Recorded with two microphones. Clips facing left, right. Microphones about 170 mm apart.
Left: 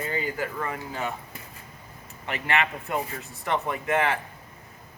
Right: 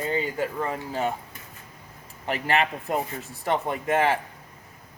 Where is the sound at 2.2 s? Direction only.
35° right (ahead or behind).